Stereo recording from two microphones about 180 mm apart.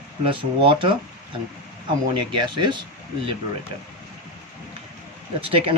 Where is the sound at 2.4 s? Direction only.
25° right (ahead or behind).